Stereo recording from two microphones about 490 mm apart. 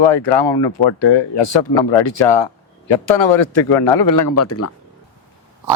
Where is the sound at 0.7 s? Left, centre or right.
Left.